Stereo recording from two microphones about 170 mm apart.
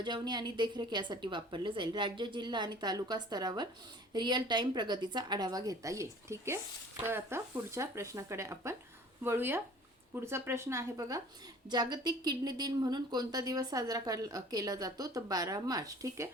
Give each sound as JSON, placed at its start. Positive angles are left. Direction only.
{"t": 0.0, "sound": "a woman's voice", "side_deg": -25}